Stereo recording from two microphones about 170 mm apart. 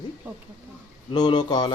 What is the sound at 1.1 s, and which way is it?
Speech, 25° left (ahead or behind).